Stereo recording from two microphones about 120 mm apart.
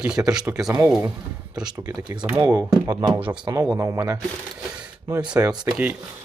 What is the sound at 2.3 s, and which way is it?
Speech, 15° right (ahead or behind).